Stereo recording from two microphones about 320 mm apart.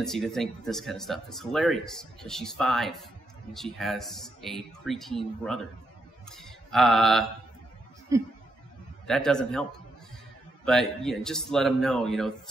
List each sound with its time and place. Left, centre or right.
0.0 s speech: centre
6.2 s mantra: centre
8.1 s speech: centre
9.0 s speech: centre